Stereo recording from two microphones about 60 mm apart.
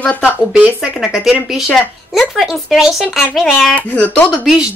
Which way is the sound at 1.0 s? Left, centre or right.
Centre.